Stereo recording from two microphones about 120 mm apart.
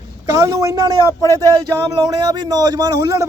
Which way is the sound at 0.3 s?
25° right (ahead or behind).